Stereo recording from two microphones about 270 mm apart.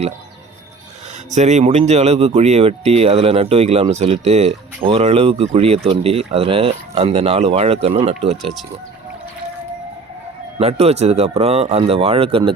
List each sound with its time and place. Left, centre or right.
1.3 s speech: right
8.4 s speech: centre
10.6 s speech: right